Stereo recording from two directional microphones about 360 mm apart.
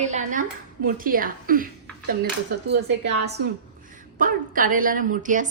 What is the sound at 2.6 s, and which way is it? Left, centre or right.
A woman's voice, right.